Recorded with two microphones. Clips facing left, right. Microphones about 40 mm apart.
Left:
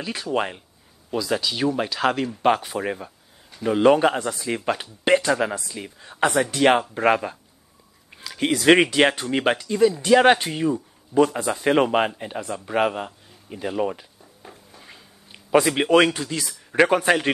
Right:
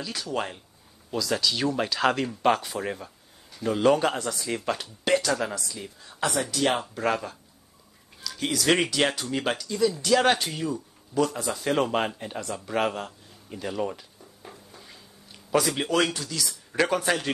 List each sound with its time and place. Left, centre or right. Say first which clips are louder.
0.0 s speech: left 5 dB; left
14.4 s a sound: left 1 dB; centre
14.8 s a man's voice: left 2 dB; left